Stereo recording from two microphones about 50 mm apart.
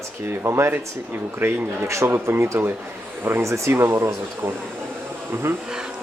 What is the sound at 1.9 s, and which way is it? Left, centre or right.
Speech, right.